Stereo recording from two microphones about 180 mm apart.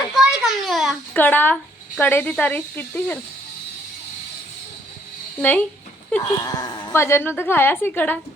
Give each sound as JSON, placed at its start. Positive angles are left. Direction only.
{"t": 0.1, "sound": "a sound", "side_deg": 0}
{"t": 1.1, "sound": "a woman's voice", "side_deg": 10}
{"t": 5.4, "sound": "a woman's voice", "side_deg": 10}